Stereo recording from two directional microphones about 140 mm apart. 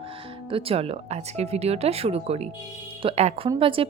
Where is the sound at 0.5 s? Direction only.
45° right (ahead or behind).